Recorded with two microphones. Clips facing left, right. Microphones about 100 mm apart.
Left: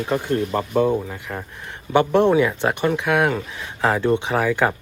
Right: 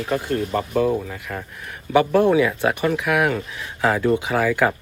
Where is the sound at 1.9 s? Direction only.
25° left (ahead or behind).